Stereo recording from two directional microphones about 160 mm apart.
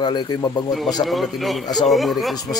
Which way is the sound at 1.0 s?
Centre (ahead or behind).